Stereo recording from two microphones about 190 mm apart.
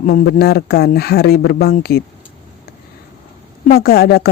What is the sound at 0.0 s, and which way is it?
Speech, 50° left (ahead or behind).